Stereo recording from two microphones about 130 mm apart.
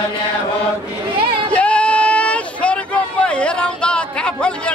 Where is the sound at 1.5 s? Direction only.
10° left (ahead or behind).